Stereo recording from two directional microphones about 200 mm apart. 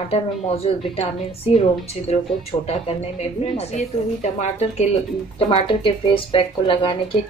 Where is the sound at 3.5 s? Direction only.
35° left (ahead or behind).